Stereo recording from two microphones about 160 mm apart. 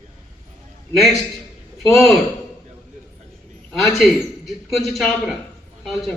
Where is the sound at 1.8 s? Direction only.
Centre (ahead or behind).